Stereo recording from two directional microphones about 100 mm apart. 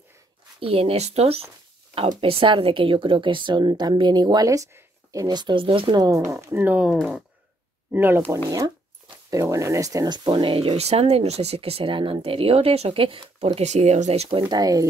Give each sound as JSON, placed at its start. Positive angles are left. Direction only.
{"t": 0.6, "sound": "speech", "side_deg": -70}
{"t": 2.0, "sound": "speech", "side_deg": -60}
{"t": 5.3, "sound": "speech", "side_deg": -50}
{"t": 5.9, "sound": "speech", "side_deg": -35}
{"t": 7.9, "sound": "speech", "side_deg": -20}
{"t": 8.5, "sound": "speech", "side_deg": -40}
{"t": 13.6, "sound": "speech", "side_deg": -90}
{"t": 14.5, "sound": "speech", "side_deg": -40}